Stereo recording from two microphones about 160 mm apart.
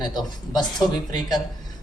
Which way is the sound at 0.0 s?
25° left (ahead or behind).